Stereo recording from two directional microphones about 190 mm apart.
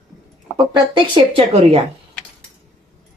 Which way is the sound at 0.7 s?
25° right (ahead or behind).